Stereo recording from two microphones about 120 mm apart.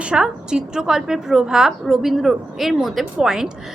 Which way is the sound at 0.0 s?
5° right (ahead or behind).